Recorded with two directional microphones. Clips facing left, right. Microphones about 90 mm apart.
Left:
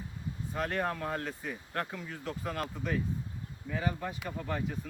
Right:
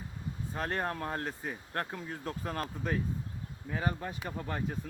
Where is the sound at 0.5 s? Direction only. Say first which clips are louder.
Left 1 dB; 35° right (ahead or behind).